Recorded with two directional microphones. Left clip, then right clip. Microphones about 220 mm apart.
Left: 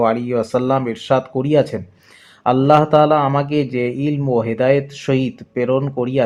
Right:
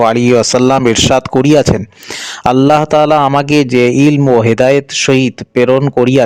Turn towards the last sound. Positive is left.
turn(degrees=-50)  # may be behind; listen again after turning